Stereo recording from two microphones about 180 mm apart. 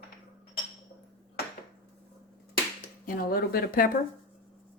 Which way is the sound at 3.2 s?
55° left (ahead or behind).